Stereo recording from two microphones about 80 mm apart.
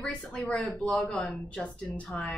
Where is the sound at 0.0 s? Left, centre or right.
Centre.